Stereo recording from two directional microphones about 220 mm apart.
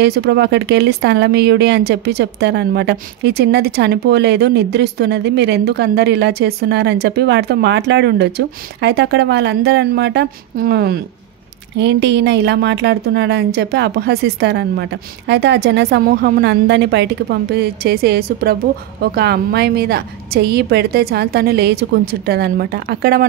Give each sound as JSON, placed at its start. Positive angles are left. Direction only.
{"t": 0.0, "sound": "a woman's voice", "side_deg": -50}